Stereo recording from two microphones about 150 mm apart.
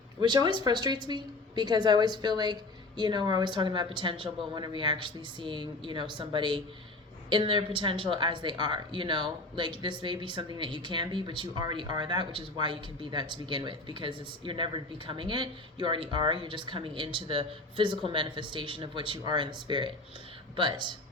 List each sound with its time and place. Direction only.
0.2 s a woman's voice: 30° right (ahead or behind)